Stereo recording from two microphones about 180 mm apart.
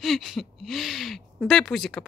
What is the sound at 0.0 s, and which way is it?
Speech, centre (ahead or behind).